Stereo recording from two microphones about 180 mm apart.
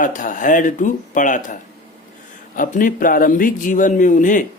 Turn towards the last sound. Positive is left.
turn(degrees=45)  # may be behind; listen again after turning